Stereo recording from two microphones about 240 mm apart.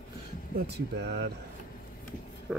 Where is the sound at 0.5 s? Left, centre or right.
Right.